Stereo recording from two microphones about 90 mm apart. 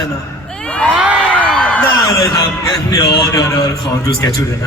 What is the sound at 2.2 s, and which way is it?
Speech, 40° left (ahead or behind).